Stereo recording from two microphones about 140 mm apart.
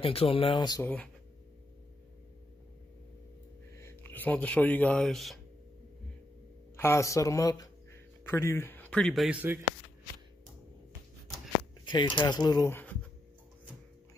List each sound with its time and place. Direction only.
0.0 s speech: 40° left (ahead or behind)
0.8 s speech: 10° left (ahead or behind)
3.7 s speech: 15° left (ahead or behind); by 5.4 s centre (ahead or behind)
6.8 s a man's voice: 20° left (ahead or behind); by 9.4 s centre (ahead or behind)
9.4 s speech: 15° right (ahead or behind)
11.8 s speech: 35° left (ahead or behind)